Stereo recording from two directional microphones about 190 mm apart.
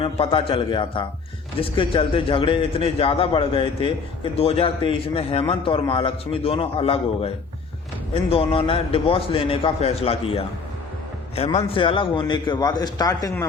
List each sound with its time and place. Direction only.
0.0 s a man's voice: 30° left (ahead or behind)